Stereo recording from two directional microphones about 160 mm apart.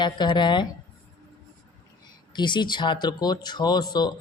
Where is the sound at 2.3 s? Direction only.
30° left (ahead or behind).